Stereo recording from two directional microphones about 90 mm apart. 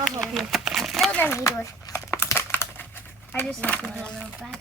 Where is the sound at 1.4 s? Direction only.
40° left (ahead or behind); by 3.5 s 20° left (ahead or behind).